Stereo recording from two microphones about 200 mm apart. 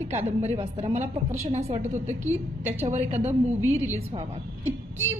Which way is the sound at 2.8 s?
35° right (ahead or behind).